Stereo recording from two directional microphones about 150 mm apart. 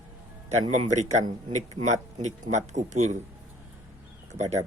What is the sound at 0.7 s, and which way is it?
Speech, 50° right (ahead or behind).